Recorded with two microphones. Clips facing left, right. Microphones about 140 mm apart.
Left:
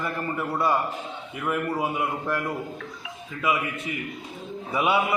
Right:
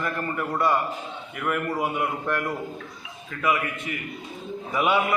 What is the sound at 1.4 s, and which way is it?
A man's voice, 20° left (ahead or behind).